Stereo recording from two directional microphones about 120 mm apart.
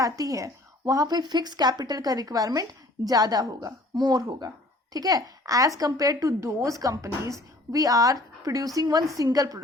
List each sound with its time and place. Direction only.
0.0 s a woman's voice: 30° right (ahead or behind)